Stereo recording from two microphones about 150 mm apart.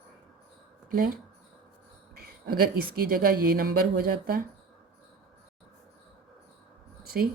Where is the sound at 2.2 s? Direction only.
80° right.